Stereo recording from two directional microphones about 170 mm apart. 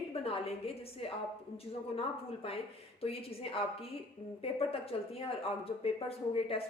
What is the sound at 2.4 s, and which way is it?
A woman's voice, 35° left (ahead or behind).